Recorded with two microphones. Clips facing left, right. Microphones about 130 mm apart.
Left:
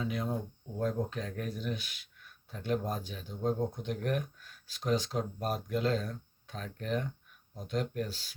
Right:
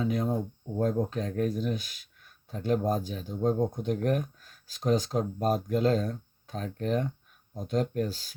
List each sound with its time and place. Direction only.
0.0 s speech: 40° right (ahead or behind)